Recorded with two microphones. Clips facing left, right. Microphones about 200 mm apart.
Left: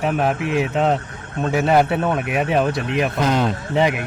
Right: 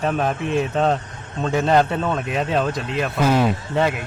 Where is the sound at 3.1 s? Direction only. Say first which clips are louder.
Right 4 dB; 5° right (ahead or behind).